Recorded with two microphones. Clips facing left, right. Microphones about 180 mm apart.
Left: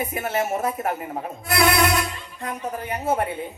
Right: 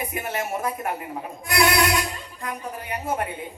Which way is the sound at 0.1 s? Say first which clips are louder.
Left 4 dB; 40° left (ahead or behind).